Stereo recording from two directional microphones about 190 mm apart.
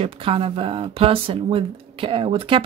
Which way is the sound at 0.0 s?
30° right (ahead or behind).